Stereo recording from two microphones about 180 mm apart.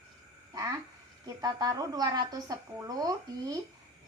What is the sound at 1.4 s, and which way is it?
Speech, 20° right (ahead or behind).